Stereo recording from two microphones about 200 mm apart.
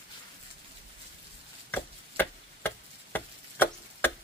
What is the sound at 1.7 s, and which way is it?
Tick-tock, 10° left (ahead or behind).